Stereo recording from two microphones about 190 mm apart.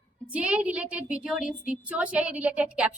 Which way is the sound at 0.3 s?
5° right (ahead or behind).